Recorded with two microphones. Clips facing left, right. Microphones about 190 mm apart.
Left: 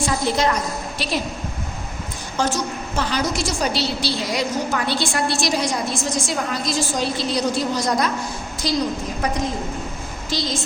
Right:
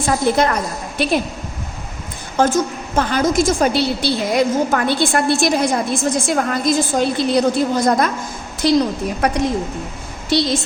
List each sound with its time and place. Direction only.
0.0 s a woman's voice: 55° right (ahead or behind)
2.6 s a woman's voice: 50° right (ahead or behind); by 10.5 s 65° right (ahead or behind)